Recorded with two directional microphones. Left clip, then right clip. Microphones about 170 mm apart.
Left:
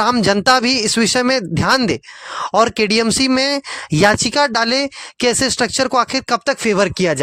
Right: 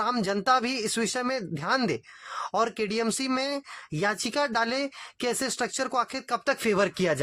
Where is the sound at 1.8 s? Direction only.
55° left (ahead or behind).